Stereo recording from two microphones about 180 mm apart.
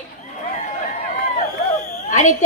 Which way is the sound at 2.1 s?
45° left (ahead or behind).